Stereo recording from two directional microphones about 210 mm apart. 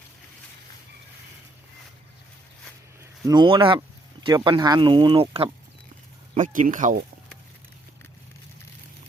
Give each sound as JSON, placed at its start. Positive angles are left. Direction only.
{"t": 3.0, "sound": "speech", "side_deg": -20}
{"t": 6.3, "sound": "speech", "side_deg": -40}